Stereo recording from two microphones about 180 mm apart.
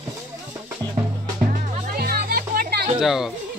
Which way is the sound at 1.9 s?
55° right (ahead or behind).